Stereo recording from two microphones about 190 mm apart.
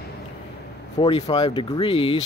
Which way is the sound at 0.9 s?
30° left (ahead or behind).